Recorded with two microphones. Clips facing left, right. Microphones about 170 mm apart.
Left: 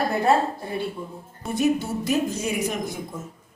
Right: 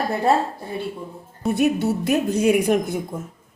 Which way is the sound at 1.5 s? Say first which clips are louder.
Right 2 dB; 65° right (ahead or behind).